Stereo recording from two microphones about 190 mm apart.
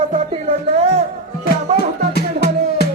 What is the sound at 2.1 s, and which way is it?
Music, 60° left (ahead or behind).